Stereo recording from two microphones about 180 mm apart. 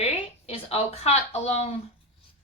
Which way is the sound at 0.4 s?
35° left (ahead or behind).